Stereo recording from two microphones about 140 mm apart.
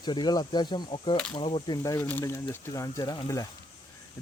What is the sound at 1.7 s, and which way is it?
Speech, 25° left (ahead or behind).